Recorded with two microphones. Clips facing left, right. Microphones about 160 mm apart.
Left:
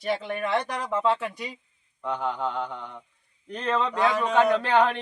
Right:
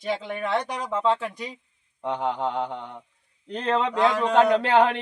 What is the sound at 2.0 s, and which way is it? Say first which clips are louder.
A man's voice: right 2 dB; 30° right (ahead or behind).